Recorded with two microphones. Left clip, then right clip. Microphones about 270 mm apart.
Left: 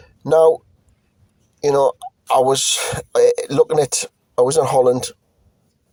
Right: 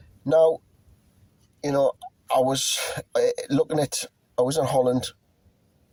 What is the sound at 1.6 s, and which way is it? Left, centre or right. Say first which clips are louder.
Speech: left 7 dB; left.